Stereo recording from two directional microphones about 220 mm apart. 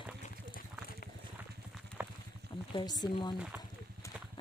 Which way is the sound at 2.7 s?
20° left (ahead or behind).